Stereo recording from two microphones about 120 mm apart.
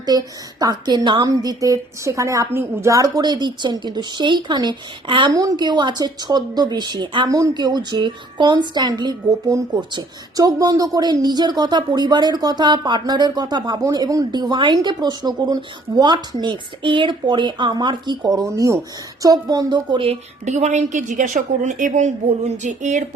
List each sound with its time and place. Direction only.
0.0 s a woman's voice: 35° right (ahead or behind)
5.3 s a woman's voice: 30° right (ahead or behind)
20.1 s a woman's voice: 70° right (ahead or behind); by 23.0 s 90° right